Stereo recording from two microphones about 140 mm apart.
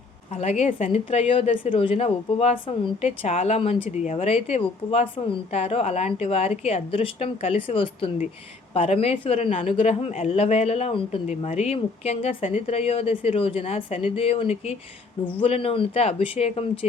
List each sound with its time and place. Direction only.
0.3 s speech: 50° left (ahead or behind)